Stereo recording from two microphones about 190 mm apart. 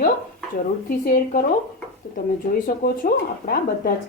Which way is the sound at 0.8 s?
50° left (ahead or behind).